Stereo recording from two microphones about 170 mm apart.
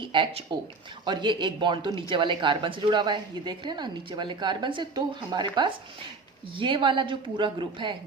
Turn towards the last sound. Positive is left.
turn(degrees=-30)  # may be behind; listen again after turning